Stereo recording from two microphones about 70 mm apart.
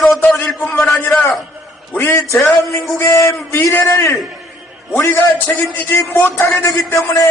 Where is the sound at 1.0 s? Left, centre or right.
Left.